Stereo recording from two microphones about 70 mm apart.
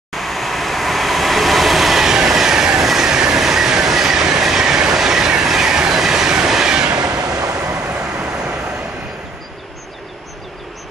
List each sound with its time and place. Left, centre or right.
0.1 s train: centre
7.0 s vehicle: right
7.7 s vehicle: centre